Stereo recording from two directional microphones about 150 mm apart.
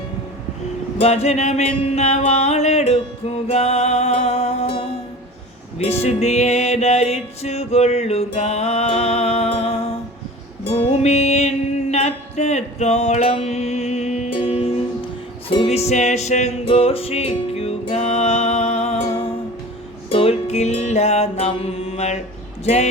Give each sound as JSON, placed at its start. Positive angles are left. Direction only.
{"t": 0.9, "sound": "music", "side_deg": 45}
{"t": 22.6, "sound": "speech", "side_deg": 45}